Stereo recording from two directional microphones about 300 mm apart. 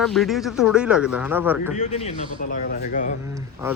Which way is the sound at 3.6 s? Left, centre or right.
Centre.